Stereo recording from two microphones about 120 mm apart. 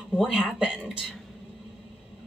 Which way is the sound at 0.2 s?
5° right (ahead or behind).